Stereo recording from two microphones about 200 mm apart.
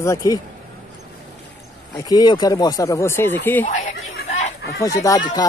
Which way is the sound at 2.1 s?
20° left (ahead or behind).